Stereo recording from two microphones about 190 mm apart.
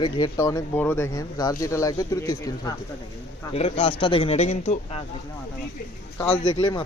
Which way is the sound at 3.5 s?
30° left (ahead or behind).